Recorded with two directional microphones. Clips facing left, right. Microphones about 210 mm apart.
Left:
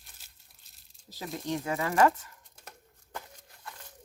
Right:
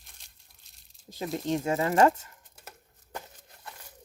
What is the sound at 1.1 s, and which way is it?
Speech, 25° right (ahead or behind).